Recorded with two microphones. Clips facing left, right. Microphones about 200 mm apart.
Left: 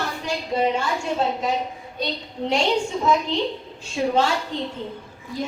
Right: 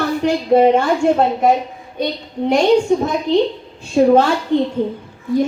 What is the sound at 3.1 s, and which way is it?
A woman's voice, 55° right (ahead or behind).